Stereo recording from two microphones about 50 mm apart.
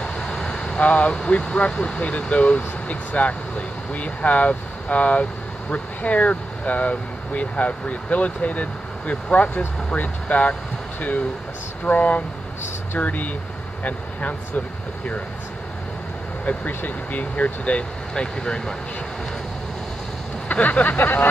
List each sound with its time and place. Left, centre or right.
0.0 s vehicle: centre
1.4 s speech: centre
11.8 s speech: left
16.4 s speech: left; by 18.8 s centre
20.4 s speech: left